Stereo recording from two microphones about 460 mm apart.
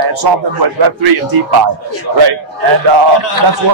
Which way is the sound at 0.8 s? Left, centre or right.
Right.